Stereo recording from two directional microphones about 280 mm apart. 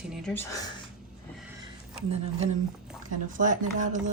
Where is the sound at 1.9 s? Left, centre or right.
Right.